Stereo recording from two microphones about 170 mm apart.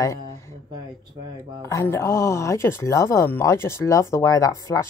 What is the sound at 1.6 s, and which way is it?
Speech, 15° left (ahead or behind).